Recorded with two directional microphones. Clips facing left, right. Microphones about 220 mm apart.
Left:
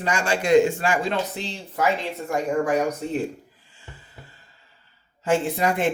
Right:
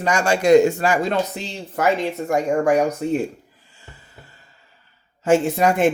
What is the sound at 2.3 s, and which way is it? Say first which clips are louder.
Speech: right 3 dB; 45° right (ahead or behind).